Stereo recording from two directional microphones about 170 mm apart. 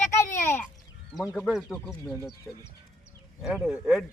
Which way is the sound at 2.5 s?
10° left (ahead or behind).